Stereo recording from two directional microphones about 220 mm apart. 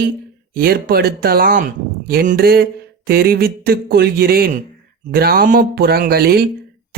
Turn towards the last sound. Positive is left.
turn(degrees=-45)  # may be behind; listen again after turning